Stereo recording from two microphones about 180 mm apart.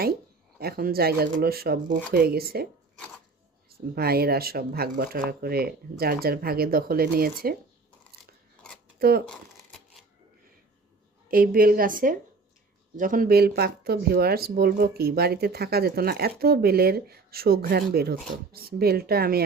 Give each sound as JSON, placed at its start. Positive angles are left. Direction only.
{"t": 0.6, "sound": "speech", "side_deg": -55}
{"t": 3.7, "sound": "speech", "side_deg": -60}
{"t": 9.0, "sound": "speech", "side_deg": -55}
{"t": 11.3, "sound": "a woman's voice", "side_deg": -55}